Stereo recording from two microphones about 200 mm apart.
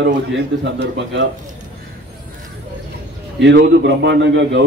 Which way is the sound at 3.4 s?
60° right (ahead or behind).